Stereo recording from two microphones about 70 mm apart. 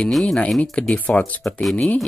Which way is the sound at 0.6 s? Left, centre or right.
Centre.